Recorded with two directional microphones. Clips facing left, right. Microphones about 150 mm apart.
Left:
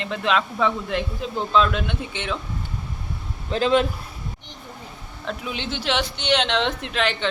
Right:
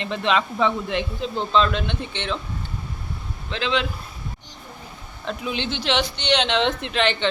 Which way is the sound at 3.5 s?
45° left (ahead or behind).